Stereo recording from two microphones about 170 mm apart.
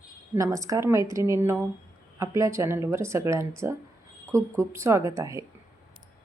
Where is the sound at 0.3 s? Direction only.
20° right (ahead or behind).